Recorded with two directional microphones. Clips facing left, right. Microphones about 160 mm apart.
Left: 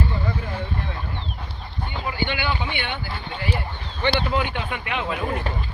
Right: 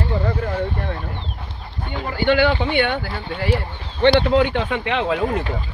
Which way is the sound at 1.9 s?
50° right (ahead or behind).